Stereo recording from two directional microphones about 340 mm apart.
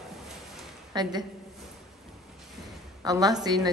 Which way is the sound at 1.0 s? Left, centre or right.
Centre.